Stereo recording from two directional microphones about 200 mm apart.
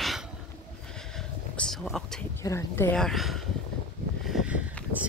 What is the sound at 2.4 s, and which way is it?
Speech, 15° left (ahead or behind).